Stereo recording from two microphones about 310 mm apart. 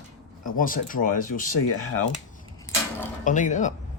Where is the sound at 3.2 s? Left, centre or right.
Left.